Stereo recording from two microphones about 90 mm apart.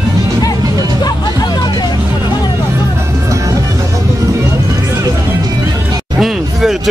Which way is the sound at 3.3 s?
35° right (ahead or behind).